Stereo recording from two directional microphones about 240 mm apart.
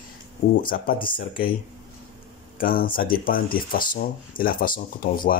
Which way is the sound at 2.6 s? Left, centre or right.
Left.